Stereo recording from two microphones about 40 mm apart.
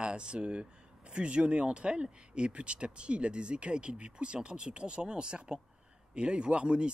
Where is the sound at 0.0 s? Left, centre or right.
Right.